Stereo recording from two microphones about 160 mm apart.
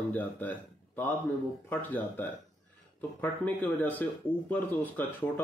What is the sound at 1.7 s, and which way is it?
Speech, 10° left (ahead or behind).